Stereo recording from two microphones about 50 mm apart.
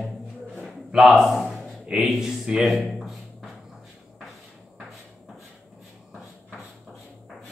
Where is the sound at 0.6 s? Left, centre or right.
Centre.